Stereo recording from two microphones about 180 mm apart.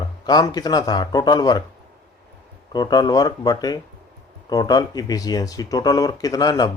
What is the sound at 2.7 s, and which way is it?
Speech, 20° left (ahead or behind).